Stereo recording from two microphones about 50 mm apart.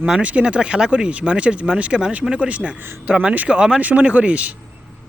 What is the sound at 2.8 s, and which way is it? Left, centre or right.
Speech, right.